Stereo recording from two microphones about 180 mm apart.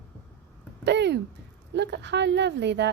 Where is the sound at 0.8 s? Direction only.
75° right (ahead or behind).